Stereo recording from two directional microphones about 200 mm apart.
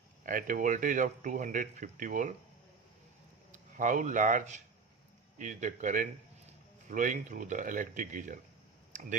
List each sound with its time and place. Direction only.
0.3 s speech: 40° right (ahead or behind)
3.5 s speech: 40° right (ahead or behind)
8.9 s clicking: 40° right (ahead or behind)